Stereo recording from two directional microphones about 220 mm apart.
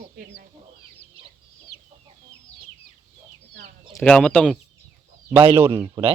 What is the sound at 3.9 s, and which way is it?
Speech, centre (ahead or behind).